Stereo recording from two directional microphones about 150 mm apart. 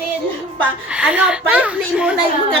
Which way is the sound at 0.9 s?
10° right (ahead or behind).